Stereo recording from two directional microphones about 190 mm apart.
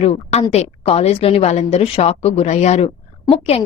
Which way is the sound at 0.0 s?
35° left (ahead or behind).